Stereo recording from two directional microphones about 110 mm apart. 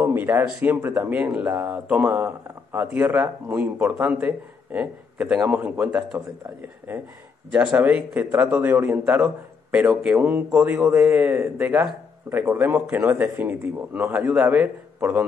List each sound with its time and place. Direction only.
0.0 s a sound: 15° right (ahead or behind)
0.3 s a man's voice: 20° right (ahead or behind)
7.5 s a man's voice: 10° right (ahead or behind)
14.1 s a man's voice: 10° right (ahead or behind)